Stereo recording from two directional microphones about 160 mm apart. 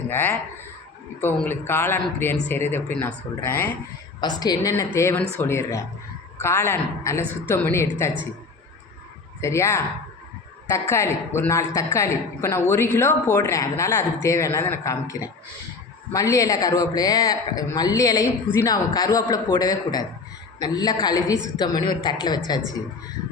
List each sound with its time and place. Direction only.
0.1 s a man's voice: 15° left (ahead or behind)
1.4 s a man's voice: 15° left (ahead or behind)
4.2 s a man's voice: 25° left (ahead or behind)
9.4 s a man's voice: 15° left (ahead or behind)